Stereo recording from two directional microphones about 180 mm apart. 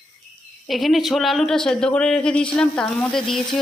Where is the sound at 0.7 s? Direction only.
Centre (ahead or behind).